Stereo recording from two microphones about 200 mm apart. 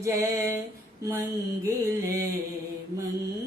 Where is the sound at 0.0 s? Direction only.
15° right (ahead or behind).